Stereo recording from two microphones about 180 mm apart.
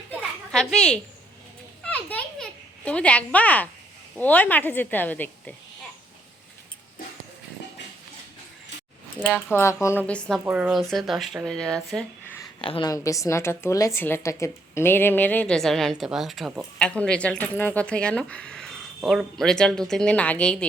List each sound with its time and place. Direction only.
0.1 s a sound: 5° left (ahead or behind)
4.2 s a woman's voice: 10° left (ahead or behind)
9.3 s a woman's voice: 15° left (ahead or behind)
10.4 s speech: 10° right (ahead or behind)
12.6 s a woman's voice: 30° left (ahead or behind)
12.9 s a woman's voice: 20° left (ahead or behind)